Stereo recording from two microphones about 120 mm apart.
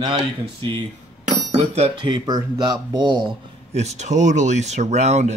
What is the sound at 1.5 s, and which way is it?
Speech, 60° right (ahead or behind).